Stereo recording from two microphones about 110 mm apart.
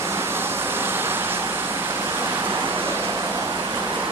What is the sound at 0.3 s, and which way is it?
Vehicle, 20° right (ahead or behind).